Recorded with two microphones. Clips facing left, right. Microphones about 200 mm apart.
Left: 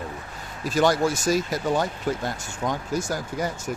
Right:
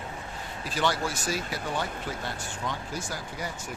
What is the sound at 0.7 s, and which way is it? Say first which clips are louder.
Speech: left 8 dB; 45° left (ahead or behind).